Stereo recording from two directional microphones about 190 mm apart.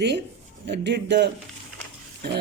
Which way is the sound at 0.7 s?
65° right (ahead or behind).